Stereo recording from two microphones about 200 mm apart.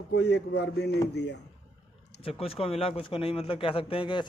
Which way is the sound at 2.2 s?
30° left (ahead or behind).